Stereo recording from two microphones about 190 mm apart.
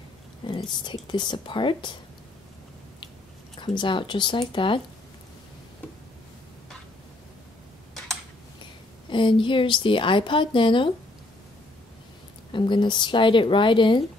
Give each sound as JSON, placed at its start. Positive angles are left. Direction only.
{"t": 0.4, "sound": "whispering", "side_deg": 25}
{"t": 1.0, "sound": "a woman's voice", "side_deg": 25}
{"t": 3.5, "sound": "a woman's voice", "side_deg": 25}
{"t": 9.1, "sound": "a woman's voice", "side_deg": 25}
{"t": 12.5, "sound": "a woman's voice", "side_deg": 25}